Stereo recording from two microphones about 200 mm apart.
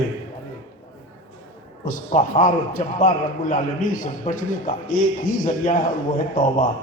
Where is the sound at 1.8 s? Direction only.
40° left (ahead or behind).